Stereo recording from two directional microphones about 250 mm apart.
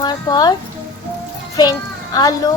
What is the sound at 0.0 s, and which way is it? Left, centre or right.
Speech, centre.